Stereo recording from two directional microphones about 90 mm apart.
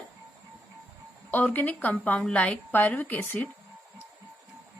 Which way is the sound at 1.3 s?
20° left (ahead or behind).